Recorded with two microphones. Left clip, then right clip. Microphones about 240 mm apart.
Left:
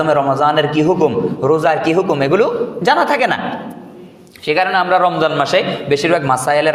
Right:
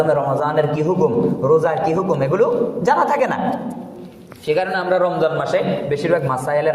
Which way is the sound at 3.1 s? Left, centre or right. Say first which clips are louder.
Left 3 dB; left.